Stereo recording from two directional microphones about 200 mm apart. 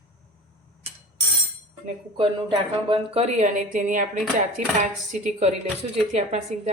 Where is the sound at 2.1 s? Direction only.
25° right (ahead or behind).